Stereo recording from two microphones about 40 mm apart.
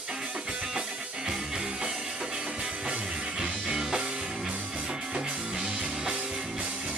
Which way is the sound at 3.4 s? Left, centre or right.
Centre.